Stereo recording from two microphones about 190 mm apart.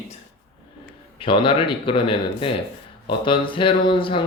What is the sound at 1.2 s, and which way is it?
Speech, 25° left (ahead or behind).